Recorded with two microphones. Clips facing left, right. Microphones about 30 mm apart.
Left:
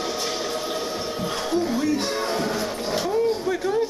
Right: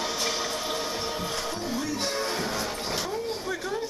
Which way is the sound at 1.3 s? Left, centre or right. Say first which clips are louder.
Left 7 dB; centre.